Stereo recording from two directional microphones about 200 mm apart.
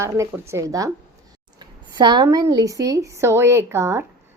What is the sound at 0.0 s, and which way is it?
A woman's voice, 15° right (ahead or behind).